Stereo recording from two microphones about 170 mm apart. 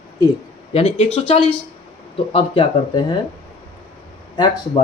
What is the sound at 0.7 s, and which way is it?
Speech, 35° left (ahead or behind).